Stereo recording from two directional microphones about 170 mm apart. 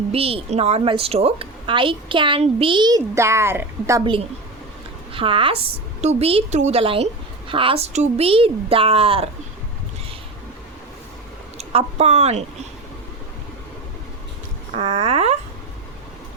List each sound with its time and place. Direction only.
0.1 s a woman's voice: 35° right (ahead or behind); by 4.1 s 20° right (ahead or behind)
5.1 s a woman's voice: 30° right (ahead or behind)
11.5 s speech: 35° right (ahead or behind)
14.8 s a woman's voice: 35° right (ahead or behind)